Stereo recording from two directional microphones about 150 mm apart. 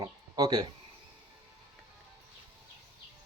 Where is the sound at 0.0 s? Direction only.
25° right (ahead or behind).